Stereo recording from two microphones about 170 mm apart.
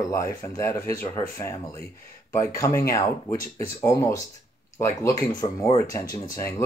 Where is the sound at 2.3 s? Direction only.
20° left (ahead or behind).